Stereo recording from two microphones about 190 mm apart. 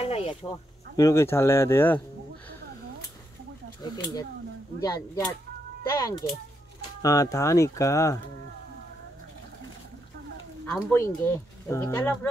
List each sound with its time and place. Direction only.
0.0 s speech: 30° left (ahead or behind); by 2.0 s 10° left (ahead or behind)
3.8 s speech: 20° left (ahead or behind)
10.6 s speech: 10° left (ahead or behind)